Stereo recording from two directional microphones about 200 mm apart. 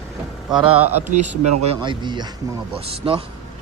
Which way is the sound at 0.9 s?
35° right (ahead or behind).